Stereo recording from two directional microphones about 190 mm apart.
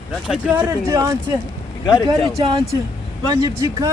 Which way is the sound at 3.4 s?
15° right (ahead or behind).